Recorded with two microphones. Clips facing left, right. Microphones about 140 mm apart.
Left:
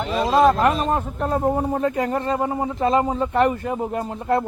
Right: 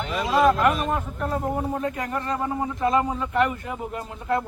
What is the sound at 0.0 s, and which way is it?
Speech, 35° left (ahead or behind).